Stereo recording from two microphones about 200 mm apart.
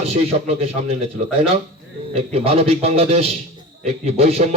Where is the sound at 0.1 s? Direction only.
30° right (ahead or behind).